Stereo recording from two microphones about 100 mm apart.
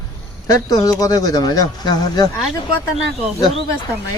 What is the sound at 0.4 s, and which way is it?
Speech, 40° left (ahead or behind).